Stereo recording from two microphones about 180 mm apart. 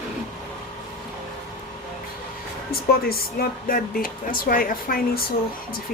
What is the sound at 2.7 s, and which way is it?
Speech, 55° left (ahead or behind).